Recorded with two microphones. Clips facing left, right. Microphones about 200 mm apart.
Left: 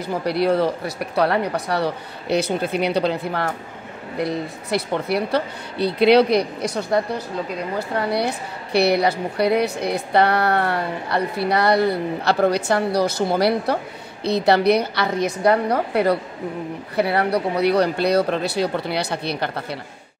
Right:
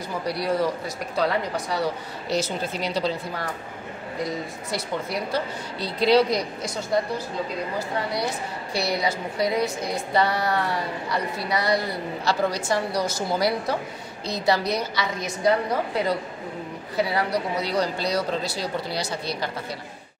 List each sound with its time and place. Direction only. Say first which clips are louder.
0.3 s a woman's voice: left 5 dB; 60° left (ahead or behind)
8.7 s a woman's voice: left 8 dB; 65° left (ahead or behind)